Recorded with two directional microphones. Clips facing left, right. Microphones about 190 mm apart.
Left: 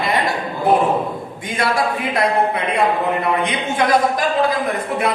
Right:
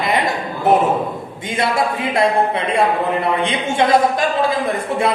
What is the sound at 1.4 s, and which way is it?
Speech, 25° right (ahead or behind).